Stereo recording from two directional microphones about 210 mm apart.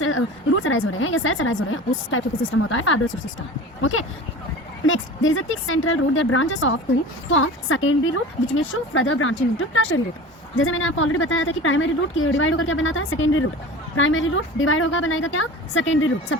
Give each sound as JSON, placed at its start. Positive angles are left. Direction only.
{"t": 0.0, "sound": "a woman's voice", "side_deg": 70}
{"t": 4.9, "sound": "a woman's voice", "side_deg": 70}